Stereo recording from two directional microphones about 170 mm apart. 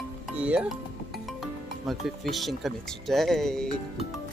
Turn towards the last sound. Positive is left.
turn(degrees=5)  # may be behind; listen again after turning